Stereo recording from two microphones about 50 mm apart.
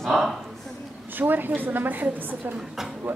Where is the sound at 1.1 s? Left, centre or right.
Right.